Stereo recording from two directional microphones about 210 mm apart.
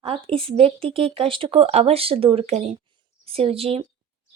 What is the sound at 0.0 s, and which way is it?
A woman's voice, 25° right (ahead or behind).